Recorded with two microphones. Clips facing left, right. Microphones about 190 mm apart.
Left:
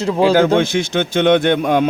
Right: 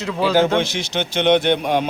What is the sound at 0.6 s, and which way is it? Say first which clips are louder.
Speech: left 6 dB; 50° left (ahead or behind).